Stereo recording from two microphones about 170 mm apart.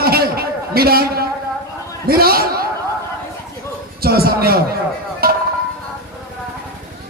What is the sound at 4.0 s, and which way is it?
Speech, 65° right (ahead or behind).